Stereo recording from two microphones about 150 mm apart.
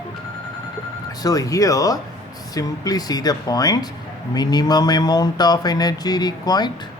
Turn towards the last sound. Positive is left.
turn(degrees=25)  # may be behind; listen again after turning